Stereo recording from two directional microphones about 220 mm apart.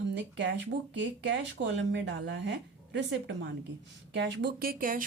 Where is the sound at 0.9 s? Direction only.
55° right (ahead or behind).